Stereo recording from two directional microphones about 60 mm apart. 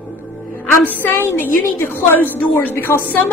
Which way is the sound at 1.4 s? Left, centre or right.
Left.